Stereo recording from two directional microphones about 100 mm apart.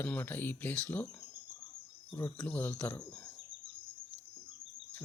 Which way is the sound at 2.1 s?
15° left (ahead or behind).